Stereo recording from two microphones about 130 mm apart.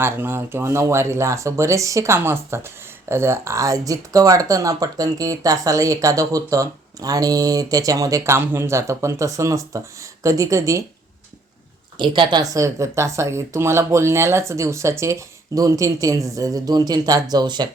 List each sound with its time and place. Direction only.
0.0 s speech: 15° right (ahead or behind)
11.9 s speech: 40° right (ahead or behind)